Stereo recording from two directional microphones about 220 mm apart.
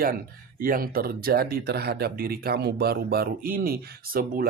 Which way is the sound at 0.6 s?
40° right (ahead or behind).